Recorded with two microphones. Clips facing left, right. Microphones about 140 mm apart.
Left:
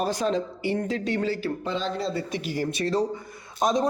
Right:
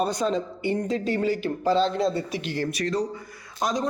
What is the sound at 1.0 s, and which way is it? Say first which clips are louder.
Speech: right 1 dB; 40° right (ahead or behind).